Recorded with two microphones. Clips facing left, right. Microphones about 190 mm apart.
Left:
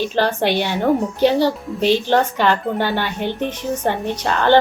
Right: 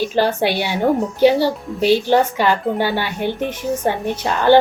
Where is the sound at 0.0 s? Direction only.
10° right (ahead or behind).